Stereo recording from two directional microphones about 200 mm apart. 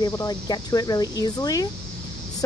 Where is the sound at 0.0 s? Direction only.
15° left (ahead or behind).